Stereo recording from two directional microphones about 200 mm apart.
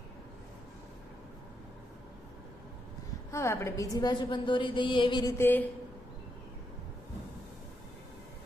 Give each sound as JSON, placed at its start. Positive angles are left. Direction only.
{"t": 3.3, "sound": "a woman's voice", "side_deg": 15}